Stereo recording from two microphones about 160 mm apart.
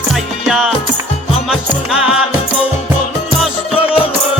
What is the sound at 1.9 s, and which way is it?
Music, 5° right (ahead or behind).